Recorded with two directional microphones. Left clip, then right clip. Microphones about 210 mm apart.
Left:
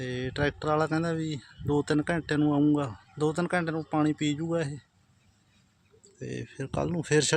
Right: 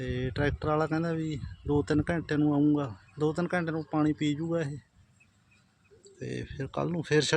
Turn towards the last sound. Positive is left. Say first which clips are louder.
# left 1 dB
turn(degrees=5)  # may be behind; listen again after turning